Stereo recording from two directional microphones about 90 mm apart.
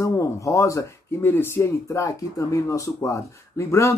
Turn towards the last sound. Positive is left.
turn(degrees=35)  # may be behind; listen again after turning